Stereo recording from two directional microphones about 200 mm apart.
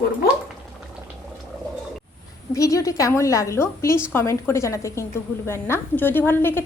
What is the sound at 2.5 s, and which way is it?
A woman's voice, 15° left (ahead or behind).